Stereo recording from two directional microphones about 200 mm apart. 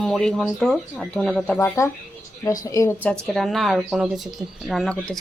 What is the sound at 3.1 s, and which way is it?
A woman's voice, centre (ahead or behind).